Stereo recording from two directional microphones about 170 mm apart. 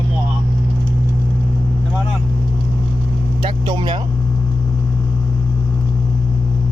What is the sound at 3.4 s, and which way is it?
Speech, 30° right (ahead or behind).